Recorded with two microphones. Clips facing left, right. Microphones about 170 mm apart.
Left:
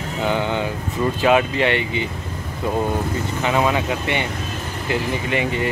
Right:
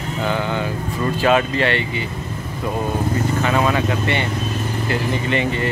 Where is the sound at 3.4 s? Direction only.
15° left (ahead or behind).